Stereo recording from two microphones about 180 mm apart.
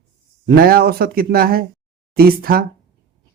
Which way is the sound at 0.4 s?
55° right (ahead or behind).